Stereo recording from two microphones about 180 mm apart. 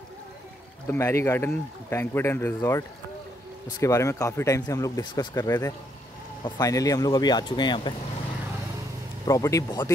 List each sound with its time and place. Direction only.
0.8 s speech: 15° left (ahead or behind)
9.2 s speech: 20° left (ahead or behind)